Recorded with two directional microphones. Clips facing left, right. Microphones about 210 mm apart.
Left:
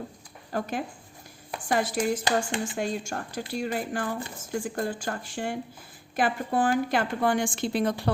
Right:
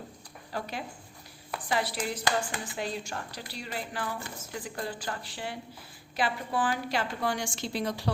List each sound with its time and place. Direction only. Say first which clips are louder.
0.5 s a woman's voice: left 6 dB; 50° left (ahead or behind)
2.2 s speech: left 4 dB; 25° left (ahead or behind)
2.7 s a woman's voice: left 5 dB; 45° left (ahead or behind)